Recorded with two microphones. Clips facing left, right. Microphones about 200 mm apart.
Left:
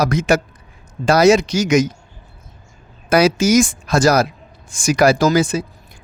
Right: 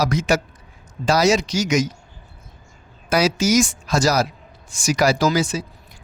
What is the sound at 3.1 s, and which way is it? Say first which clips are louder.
Speech: left 4 dB; 55° left (ahead or behind).